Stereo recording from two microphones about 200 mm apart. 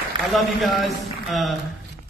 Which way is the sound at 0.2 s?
25° right (ahead or behind).